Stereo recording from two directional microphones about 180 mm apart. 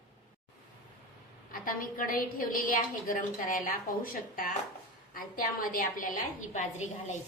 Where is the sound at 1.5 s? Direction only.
50° left (ahead or behind).